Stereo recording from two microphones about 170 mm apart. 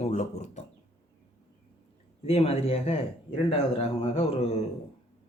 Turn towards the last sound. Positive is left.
turn(degrees=35)  # may be behind; listen again after turning